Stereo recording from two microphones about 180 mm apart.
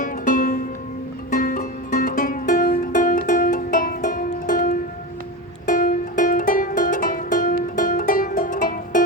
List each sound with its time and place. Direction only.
0.0 s music: 50° left (ahead or behind)